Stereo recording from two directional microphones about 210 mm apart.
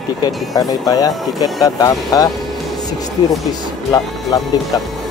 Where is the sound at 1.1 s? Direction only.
Centre (ahead or behind).